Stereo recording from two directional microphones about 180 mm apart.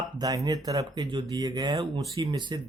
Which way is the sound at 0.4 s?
20° right (ahead or behind).